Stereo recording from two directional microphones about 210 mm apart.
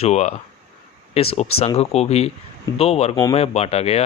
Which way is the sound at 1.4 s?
30° left (ahead or behind).